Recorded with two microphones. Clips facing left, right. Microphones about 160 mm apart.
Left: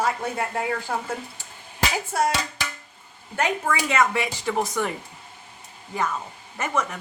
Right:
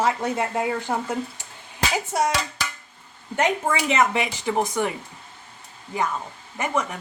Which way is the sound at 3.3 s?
25° right (ahead or behind).